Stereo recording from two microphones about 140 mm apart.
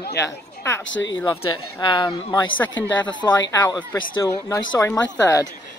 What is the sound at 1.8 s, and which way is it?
Speech, 35° left (ahead or behind).